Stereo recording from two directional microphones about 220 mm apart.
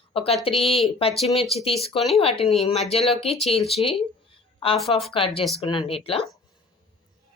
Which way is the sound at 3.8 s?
25° left (ahead or behind).